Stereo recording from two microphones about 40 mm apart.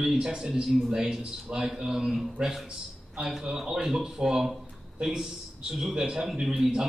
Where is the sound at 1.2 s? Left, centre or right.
Centre.